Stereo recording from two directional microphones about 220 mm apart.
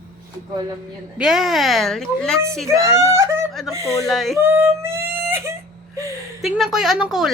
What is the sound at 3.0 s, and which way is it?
Speech, 15° right (ahead or behind).